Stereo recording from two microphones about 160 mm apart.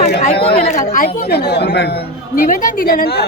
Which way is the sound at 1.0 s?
85° left.